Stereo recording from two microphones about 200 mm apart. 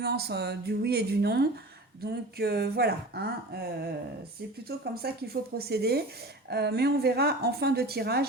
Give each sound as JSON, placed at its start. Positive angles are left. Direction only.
{"t": 0.0, "sound": "speech", "side_deg": -55}
{"t": 5.0, "sound": "speech", "side_deg": -50}